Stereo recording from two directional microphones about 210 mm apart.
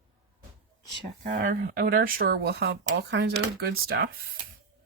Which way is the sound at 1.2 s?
40° right (ahead or behind).